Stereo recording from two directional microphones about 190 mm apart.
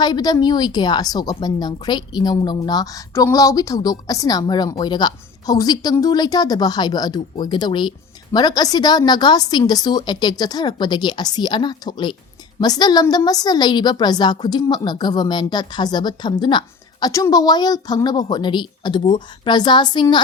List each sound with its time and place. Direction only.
0.0 s a woman's voice: 20° left (ahead or behind)